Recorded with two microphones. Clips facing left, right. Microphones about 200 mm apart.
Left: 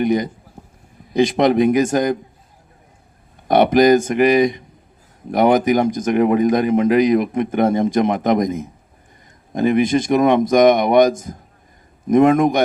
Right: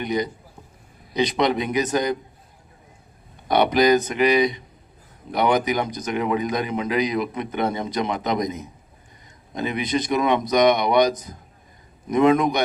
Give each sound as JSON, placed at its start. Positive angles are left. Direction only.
{"t": 0.0, "sound": "speech", "side_deg": 50}
{"t": 3.5, "sound": "speech", "side_deg": 45}